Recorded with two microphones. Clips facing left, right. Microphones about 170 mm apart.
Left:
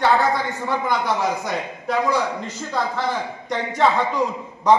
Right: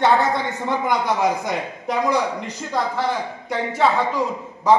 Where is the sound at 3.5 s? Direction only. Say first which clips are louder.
Even; 5° right (ahead or behind).